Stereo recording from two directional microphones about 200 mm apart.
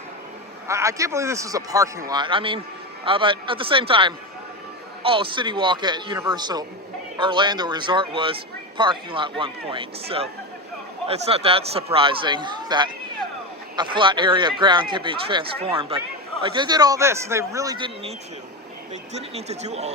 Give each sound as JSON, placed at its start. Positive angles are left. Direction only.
{"t": 0.7, "sound": "speech", "side_deg": -15}
{"t": 19.1, "sound": "speech", "side_deg": -30}